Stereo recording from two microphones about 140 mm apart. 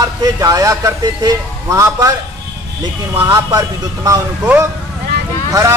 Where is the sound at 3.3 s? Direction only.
25° right (ahead or behind).